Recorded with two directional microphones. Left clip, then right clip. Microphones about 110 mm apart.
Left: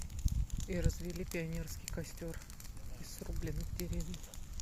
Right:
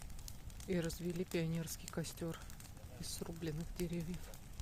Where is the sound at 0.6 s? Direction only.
30° right (ahead or behind).